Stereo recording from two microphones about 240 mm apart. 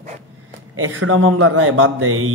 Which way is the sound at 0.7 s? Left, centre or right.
Right.